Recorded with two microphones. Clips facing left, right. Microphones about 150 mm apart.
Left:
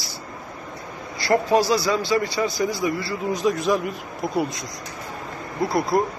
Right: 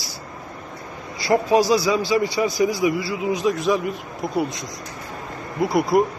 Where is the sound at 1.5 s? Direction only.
15° right (ahead or behind).